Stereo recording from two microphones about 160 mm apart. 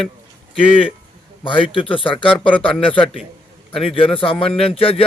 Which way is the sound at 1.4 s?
35° left (ahead or behind).